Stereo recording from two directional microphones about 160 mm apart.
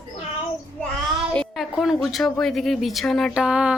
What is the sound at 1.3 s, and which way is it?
A woman's voice, centre (ahead or behind).